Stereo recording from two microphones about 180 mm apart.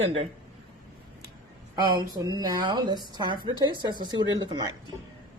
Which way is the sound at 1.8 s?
25° right (ahead or behind).